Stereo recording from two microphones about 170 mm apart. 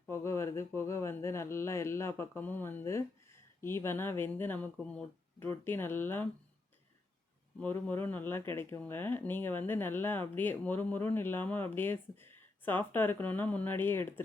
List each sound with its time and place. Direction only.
0.1 s a sound: 15° left (ahead or behind)
3.6 s speech: 15° left (ahead or behind)
7.6 s speech: 10° left (ahead or behind)